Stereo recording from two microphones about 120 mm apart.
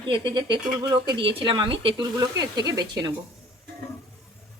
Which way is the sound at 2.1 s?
35° right (ahead or behind).